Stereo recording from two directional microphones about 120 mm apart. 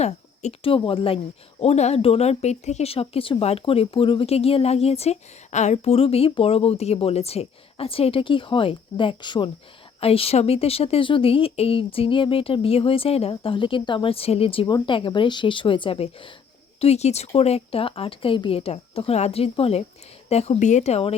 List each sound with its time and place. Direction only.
0.0 s speech: 60° left (ahead or behind)
0.8 s speech: 50° left (ahead or behind)
1.6 s speech: 65° left (ahead or behind); by 9.5 s 40° left (ahead or behind)
10.0 s speech: 55° left (ahead or behind)
16.8 s speech: 60° left (ahead or behind)